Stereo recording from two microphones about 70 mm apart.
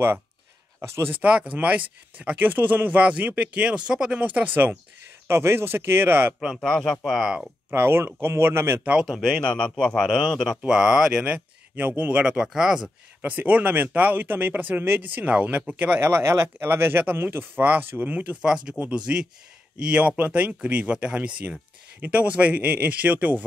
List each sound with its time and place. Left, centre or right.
0.7 s speech: right
1.1 s speech: centre
5.3 s speech: right
6.6 s a man's voice: centre
7.7 s speech: right
9.2 s speech: centre
10.6 s speech: centre
11.2 s a sound: right
12.0 s speech: centre
13.2 s speech: right
16.0 s speech: right